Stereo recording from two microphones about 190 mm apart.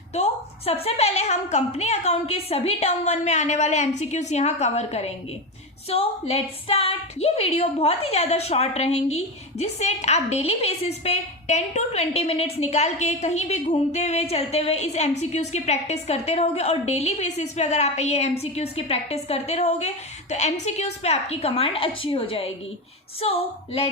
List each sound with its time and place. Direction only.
0.1 s a woman's voice: 35° left (ahead or behind)